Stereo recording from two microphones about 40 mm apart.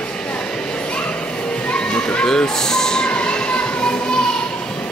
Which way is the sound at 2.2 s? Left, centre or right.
Centre.